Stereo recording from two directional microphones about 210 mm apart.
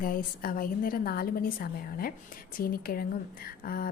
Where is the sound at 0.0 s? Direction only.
45° left (ahead or behind).